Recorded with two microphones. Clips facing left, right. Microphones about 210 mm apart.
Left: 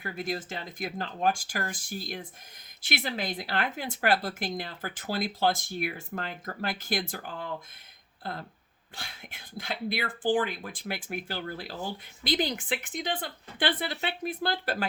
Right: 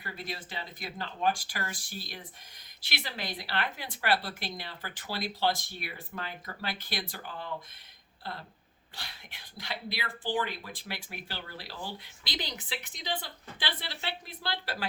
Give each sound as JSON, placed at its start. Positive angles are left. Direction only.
{"t": 0.0, "sound": "speech", "side_deg": 45}